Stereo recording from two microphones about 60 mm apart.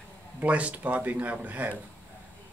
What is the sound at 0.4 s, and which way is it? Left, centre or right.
Speech, right.